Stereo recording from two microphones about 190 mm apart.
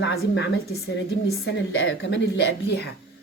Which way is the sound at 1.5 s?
70° left (ahead or behind).